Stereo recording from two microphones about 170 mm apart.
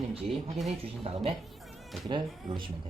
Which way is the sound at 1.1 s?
35° right (ahead or behind).